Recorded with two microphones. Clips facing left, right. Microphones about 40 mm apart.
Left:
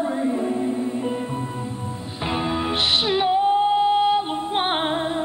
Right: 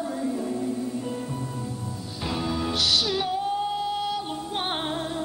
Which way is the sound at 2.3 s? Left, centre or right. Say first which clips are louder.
Left 4 dB; left.